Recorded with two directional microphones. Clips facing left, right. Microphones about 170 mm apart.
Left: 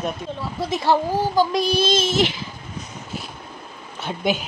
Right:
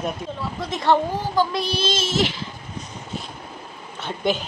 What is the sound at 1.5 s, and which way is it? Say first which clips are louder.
Child singing: left 5 dB; 15° left (ahead or behind).